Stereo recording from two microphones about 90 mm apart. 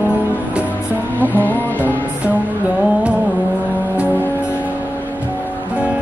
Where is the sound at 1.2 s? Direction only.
20° left (ahead or behind).